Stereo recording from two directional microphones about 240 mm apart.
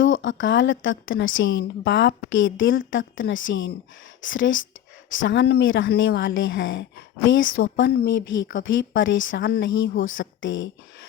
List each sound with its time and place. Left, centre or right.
0.0 s a woman's voice: left